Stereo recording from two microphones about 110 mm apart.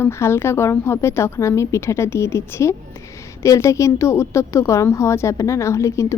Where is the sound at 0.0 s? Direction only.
25° left (ahead or behind).